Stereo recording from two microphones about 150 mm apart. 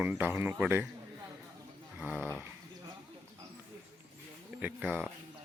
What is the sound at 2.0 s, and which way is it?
Speech, 10° right (ahead or behind).